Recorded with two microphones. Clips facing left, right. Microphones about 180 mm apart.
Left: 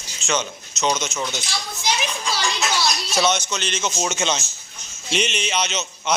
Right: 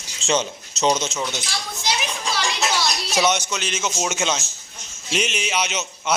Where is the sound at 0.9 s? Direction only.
25° right (ahead or behind).